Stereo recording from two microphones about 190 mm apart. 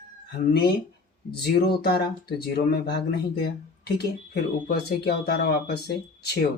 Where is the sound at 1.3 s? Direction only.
55° left (ahead or behind).